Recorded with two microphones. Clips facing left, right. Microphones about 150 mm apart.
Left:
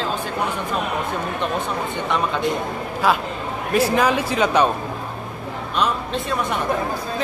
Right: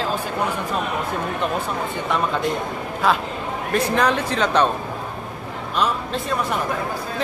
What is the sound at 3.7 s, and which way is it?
Speech, 5° left (ahead or behind).